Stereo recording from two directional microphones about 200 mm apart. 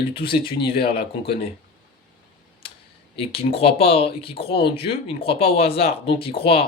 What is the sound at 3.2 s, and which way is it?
Speech, 30° left (ahead or behind).